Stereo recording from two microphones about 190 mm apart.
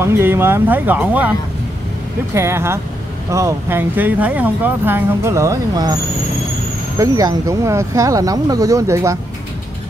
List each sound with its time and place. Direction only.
0.0 s speech: 10° right (ahead or behind)
2.3 s speech: 15° right (ahead or behind)
7.0 s speech: 20° right (ahead or behind)